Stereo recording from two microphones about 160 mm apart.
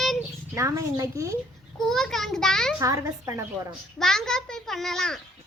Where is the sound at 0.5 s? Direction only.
20° right (ahead or behind).